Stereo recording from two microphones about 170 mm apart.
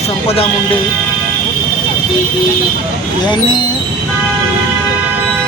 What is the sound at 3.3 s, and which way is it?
Speech, 25° left (ahead or behind).